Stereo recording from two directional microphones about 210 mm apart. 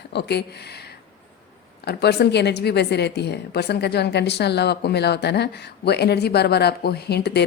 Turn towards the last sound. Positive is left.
turn(degrees=50)  # may be behind; listen again after turning